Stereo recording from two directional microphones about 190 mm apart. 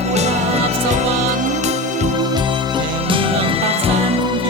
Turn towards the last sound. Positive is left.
turn(degrees=-30)  # may be behind; listen again after turning